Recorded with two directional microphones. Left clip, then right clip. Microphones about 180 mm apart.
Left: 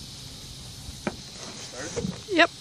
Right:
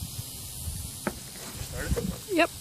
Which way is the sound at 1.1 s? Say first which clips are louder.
Left 1 dB; 10° left (ahead or behind).